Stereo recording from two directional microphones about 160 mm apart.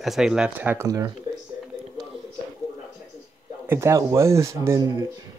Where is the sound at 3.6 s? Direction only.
15° right (ahead or behind).